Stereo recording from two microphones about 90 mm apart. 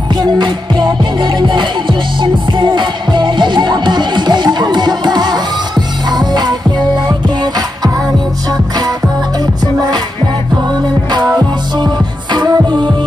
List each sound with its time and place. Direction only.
0.1 s music: 55° right (ahead or behind)
11.1 s music: 50° right (ahead or behind)